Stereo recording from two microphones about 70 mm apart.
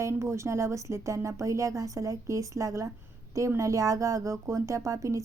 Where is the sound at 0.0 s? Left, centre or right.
Right.